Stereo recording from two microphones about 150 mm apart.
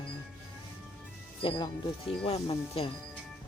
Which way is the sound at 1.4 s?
30° left (ahead or behind).